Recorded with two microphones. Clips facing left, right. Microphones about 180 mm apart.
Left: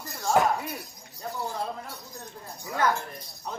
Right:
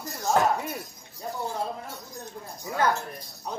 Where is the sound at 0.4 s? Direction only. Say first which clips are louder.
Even; 10° left (ahead or behind).